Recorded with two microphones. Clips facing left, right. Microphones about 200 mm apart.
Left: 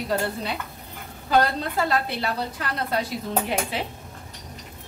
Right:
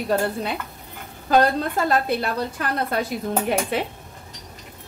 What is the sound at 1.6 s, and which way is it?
A woman's voice, 50° right (ahead or behind).